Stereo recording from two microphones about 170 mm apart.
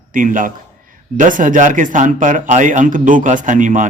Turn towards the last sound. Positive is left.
turn(degrees=-50)  # may be behind; listen again after turning